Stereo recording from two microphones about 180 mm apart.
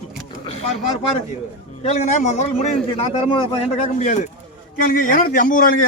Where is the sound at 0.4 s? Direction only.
35° left (ahead or behind).